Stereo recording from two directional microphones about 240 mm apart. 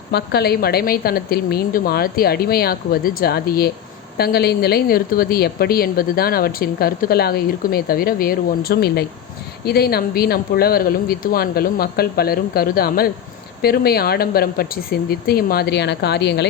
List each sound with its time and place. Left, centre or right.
0.1 s a woman's voice: left